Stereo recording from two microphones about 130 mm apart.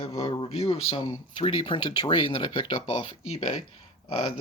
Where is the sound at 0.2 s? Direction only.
45° left (ahead or behind).